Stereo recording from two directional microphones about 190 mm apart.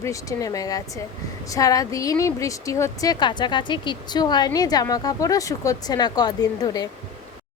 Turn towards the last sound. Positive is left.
turn(degrees=20)  # may be behind; listen again after turning